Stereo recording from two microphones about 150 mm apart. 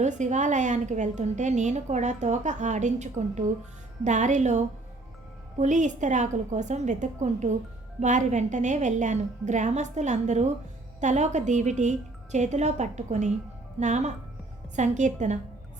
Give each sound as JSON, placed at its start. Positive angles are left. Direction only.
{"t": 0.0, "sound": "a woman's voice", "side_deg": -50}